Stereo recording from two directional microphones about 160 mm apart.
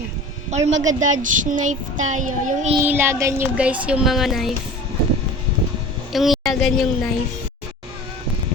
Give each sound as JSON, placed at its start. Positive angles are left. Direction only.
{"t": 0.5, "sound": "a woman's voice", "side_deg": -45}
{"t": 2.8, "sound": "child singing", "side_deg": -15}
{"t": 3.6, "sound": "a woman's voice", "side_deg": -5}
{"t": 6.1, "sound": "a woman's voice", "side_deg": 0}